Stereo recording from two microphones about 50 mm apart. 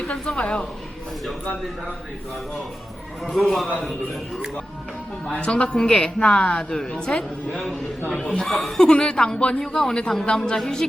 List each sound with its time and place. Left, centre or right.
0.0 s a woman's voice: centre
3.2 s a man's voice: centre
5.5 s a woman's voice: centre
8.4 s a man's voice: centre
8.9 s a woman's voice: centre